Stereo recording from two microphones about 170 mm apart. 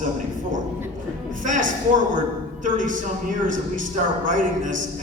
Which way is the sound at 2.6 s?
50° right (ahead or behind).